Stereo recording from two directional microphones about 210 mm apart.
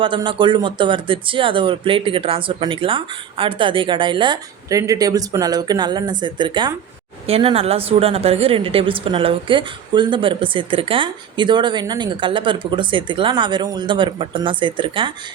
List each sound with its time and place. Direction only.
0.0 s speech: 25° right (ahead or behind)